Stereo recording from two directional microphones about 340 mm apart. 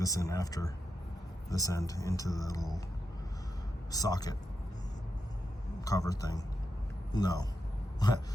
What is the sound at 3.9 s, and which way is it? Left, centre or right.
Speech, centre.